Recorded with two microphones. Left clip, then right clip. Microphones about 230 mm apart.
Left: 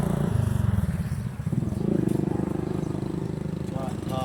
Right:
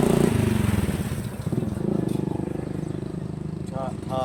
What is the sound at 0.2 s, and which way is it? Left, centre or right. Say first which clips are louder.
Vehicle: right 8 dB; right.